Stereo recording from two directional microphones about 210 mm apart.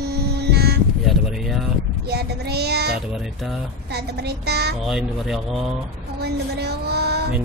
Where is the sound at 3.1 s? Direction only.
Centre (ahead or behind).